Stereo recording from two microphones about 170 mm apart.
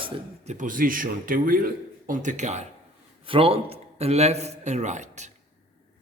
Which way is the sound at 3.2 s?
30° right (ahead or behind).